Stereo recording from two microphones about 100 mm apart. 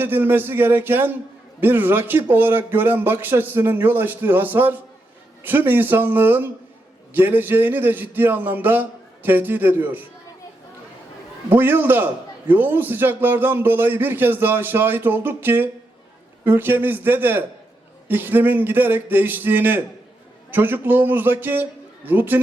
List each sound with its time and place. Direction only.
0.0 s a man's voice: 20° right (ahead or behind)
11.5 s a man's voice: 20° right (ahead or behind)